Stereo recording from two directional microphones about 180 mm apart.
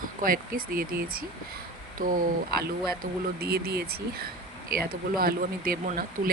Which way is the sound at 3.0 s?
60° right (ahead or behind).